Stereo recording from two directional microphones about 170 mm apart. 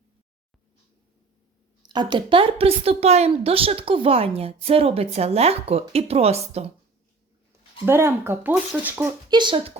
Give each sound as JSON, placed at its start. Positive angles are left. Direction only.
{"t": 1.8, "sound": "a woman's voice", "side_deg": -25}
{"t": 7.9, "sound": "speech", "side_deg": -15}
{"t": 9.3, "sound": "speech", "side_deg": -30}